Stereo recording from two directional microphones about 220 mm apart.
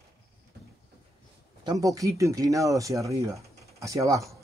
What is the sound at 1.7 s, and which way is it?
Speech, 15° right (ahead or behind).